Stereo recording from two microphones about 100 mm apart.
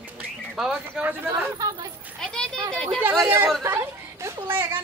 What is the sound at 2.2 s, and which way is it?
Speech, 5° left (ahead or behind).